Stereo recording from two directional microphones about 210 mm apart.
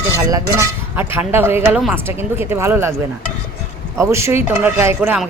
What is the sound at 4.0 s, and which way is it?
Speech, 15° right (ahead or behind).